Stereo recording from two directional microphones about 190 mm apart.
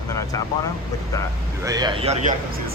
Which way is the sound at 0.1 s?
15° left (ahead or behind).